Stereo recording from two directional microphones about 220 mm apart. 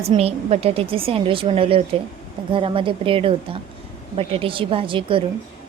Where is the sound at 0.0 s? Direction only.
25° right (ahead or behind).